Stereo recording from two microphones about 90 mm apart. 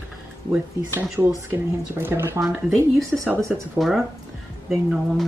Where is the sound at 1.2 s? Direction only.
30° right (ahead or behind).